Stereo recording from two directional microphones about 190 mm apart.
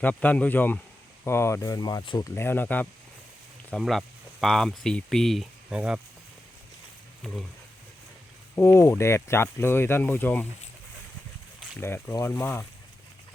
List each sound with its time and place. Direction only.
0.0 s speech: 10° left (ahead or behind)
2.3 s speech: 10° left (ahead or behind); by 6.0 s 5° right (ahead or behind)
7.2 s speech: 5° left (ahead or behind)
8.5 s speech: 15° left (ahead or behind)
11.8 s speech: 10° left (ahead or behind)